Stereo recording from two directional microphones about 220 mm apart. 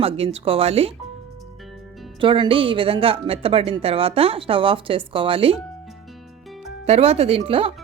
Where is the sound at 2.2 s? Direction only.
20° right (ahead or behind).